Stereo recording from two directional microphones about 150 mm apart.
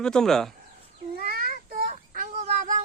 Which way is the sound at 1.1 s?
75° right (ahead or behind).